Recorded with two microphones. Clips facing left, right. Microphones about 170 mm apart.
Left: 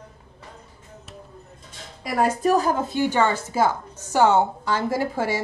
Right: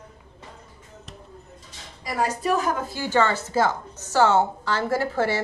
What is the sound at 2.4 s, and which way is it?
Speech, 40° left (ahead or behind).